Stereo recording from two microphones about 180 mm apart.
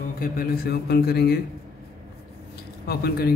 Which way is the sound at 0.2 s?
55° left (ahead or behind).